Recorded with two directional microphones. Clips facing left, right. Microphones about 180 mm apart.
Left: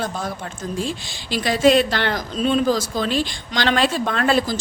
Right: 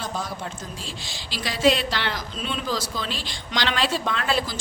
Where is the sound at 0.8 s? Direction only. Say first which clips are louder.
Left 10 dB; 50° left (ahead or behind).